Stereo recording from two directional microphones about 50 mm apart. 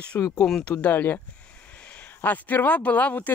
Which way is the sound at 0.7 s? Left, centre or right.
Left.